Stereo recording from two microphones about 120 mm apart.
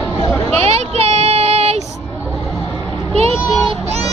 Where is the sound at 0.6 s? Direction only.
60° right (ahead or behind).